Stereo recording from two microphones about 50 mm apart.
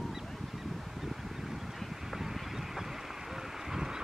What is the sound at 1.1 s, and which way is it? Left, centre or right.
Wind, centre.